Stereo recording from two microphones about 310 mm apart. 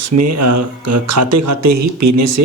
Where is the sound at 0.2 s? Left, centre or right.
Right.